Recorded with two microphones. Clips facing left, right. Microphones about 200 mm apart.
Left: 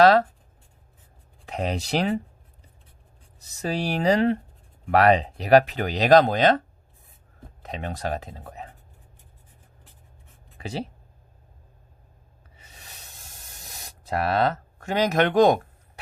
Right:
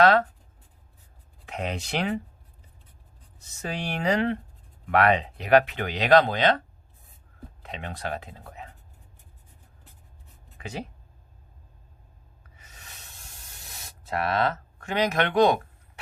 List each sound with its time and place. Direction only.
0.0 s writing: 35° left (ahead or behind)
1.5 s speech: 35° left (ahead or behind)
3.5 s speech: 35° left (ahead or behind)
7.6 s speech: 40° left (ahead or behind)
10.6 s speech: 35° left (ahead or behind)
14.0 s speech: 35° left (ahead or behind)